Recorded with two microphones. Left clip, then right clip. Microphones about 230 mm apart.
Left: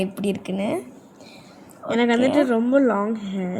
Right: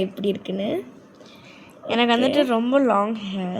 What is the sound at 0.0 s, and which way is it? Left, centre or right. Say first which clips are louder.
Speech: right 1 dB; left.